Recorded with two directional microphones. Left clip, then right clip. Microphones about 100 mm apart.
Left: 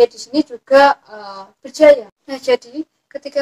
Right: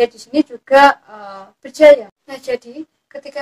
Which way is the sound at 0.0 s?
35° right (ahead or behind).